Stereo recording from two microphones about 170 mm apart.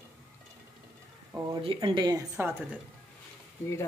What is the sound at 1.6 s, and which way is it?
Speech, 30° right (ahead or behind).